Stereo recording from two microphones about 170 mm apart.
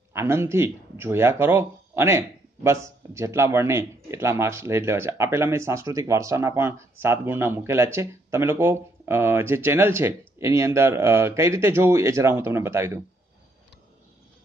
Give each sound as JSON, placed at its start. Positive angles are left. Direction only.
{"t": 0.1, "sound": "speech", "side_deg": -15}